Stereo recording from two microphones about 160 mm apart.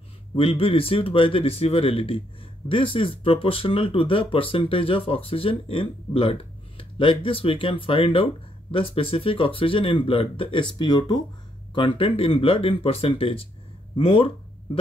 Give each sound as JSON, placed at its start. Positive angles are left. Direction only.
{"t": 0.4, "sound": "speech", "side_deg": 35}